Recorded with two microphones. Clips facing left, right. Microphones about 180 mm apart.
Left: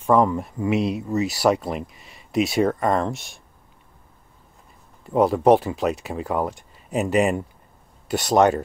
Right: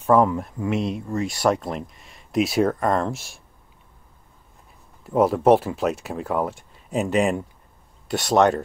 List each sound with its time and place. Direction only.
0.1 s speech: centre (ahead or behind)
5.0 s speech: centre (ahead or behind)